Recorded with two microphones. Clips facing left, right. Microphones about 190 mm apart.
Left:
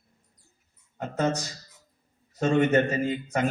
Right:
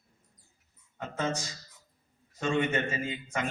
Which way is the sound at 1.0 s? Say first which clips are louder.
Left 6 dB; 40° left (ahead or behind).